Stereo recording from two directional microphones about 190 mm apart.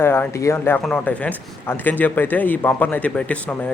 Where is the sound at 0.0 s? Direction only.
10° left (ahead or behind).